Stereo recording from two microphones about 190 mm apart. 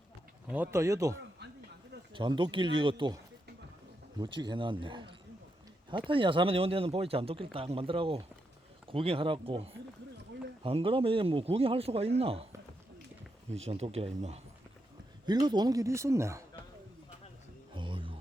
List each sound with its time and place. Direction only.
0.4 s speech: 10° right (ahead or behind); by 3.2 s 25° right (ahead or behind)
4.2 s a man's voice: 25° right (ahead or behind)
13.7 s a man's voice: 35° right (ahead or behind)
15.3 s speech: 20° right (ahead or behind)
17.7 s a sound: 25° right (ahead or behind)